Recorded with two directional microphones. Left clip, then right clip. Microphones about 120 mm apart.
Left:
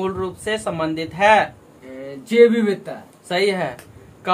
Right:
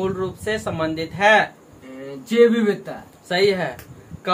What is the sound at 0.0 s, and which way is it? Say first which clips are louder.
Speech: even; 45° left (ahead or behind).